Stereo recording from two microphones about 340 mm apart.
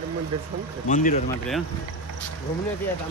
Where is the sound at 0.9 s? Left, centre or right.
Left.